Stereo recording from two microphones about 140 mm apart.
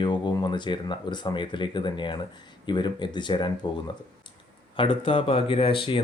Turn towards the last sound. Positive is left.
turn(degrees=40)  # may be behind; listen again after turning